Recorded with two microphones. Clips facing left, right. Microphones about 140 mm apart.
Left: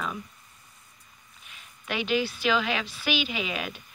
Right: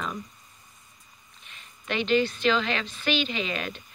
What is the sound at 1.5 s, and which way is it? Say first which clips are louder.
A woman's voice: right 2 dB; 5° left (ahead or behind).